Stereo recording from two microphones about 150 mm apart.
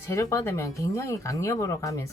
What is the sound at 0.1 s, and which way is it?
Speech, 20° left (ahead or behind).